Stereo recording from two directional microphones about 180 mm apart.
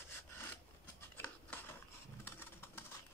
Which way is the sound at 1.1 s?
10° left (ahead or behind).